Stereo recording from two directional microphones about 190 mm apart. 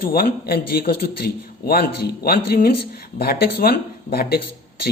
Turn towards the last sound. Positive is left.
turn(degrees=55)  # may be behind; listen again after turning